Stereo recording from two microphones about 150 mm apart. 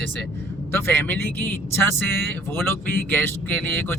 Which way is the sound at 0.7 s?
15° left (ahead or behind).